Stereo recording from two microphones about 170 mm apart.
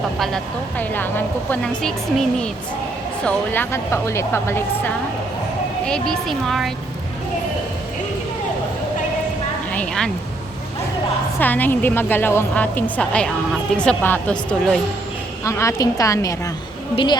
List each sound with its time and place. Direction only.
0.2 s a woman's voice: centre (ahead or behind)
9.7 s a sound: 5° left (ahead or behind)
11.3 s a woman's voice: 10° left (ahead or behind)
15.4 s a woman's voice: 15° left (ahead or behind)